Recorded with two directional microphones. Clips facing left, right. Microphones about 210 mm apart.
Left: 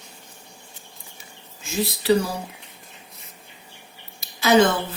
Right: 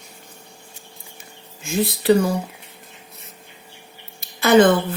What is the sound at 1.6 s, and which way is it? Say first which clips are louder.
Speech: right 4 dB; 55° right (ahead or behind).